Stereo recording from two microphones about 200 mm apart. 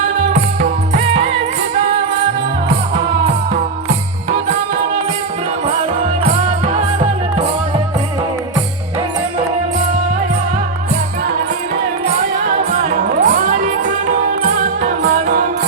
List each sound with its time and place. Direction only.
0.9 s music: 30° right (ahead or behind)
5.6 s music: 35° right (ahead or behind)
13.0 s music: 45° right (ahead or behind)